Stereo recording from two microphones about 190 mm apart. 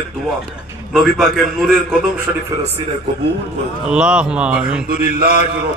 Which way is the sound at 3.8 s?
5° right (ahead or behind).